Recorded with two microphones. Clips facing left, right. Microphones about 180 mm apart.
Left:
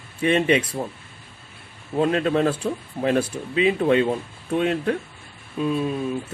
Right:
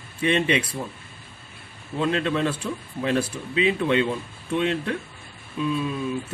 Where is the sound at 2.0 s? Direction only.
40° left (ahead or behind).